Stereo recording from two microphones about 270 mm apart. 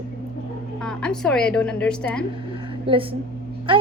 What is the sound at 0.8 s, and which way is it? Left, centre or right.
A woman's voice, centre.